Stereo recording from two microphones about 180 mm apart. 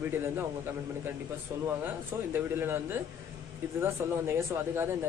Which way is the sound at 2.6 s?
10° right (ahead or behind).